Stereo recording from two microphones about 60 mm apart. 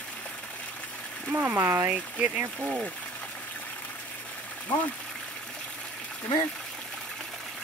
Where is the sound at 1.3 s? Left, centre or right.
Right.